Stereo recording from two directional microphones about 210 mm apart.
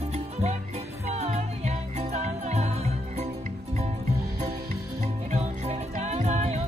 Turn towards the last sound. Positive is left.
turn(degrees=-30)  # may be behind; listen again after turning